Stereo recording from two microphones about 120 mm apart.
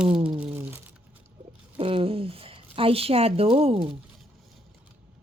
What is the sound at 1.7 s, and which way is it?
Speech, 50° right (ahead or behind).